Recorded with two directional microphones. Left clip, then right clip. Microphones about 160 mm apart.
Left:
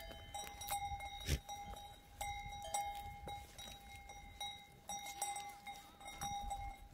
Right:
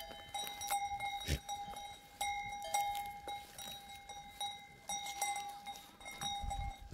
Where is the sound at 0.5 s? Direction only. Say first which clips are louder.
Right 5 dB; 30° right (ahead or behind).